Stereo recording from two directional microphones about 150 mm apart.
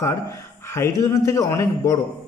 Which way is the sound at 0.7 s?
20° left (ahead or behind).